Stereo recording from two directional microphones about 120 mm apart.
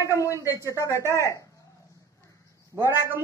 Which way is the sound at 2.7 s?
25° right (ahead or behind).